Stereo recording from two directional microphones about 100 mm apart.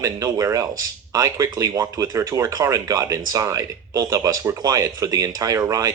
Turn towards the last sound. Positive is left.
turn(degrees=-35)  # may be behind; listen again after turning